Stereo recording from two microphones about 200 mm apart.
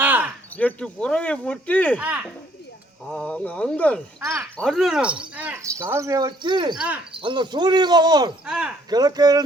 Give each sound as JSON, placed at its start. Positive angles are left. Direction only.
{"t": 0.0, "sound": "a sound", "side_deg": -10}
{"t": 0.5, "sound": "speech", "side_deg": 5}
{"t": 2.0, "sound": "speech", "side_deg": -5}
{"t": 3.1, "sound": "speech", "side_deg": 5}
{"t": 4.2, "sound": "speech", "side_deg": -10}
{"t": 4.5, "sound": "speech", "side_deg": 0}
{"t": 6.7, "sound": "speech", "side_deg": -5}
{"t": 7.1, "sound": "cricket", "side_deg": -25}
{"t": 8.4, "sound": "speech", "side_deg": -5}
{"t": 8.9, "sound": "cricket", "side_deg": -20}